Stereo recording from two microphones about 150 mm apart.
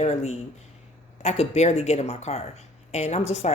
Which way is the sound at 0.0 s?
45° left (ahead or behind).